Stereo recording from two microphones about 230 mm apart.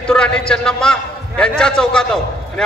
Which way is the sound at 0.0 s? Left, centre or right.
Centre.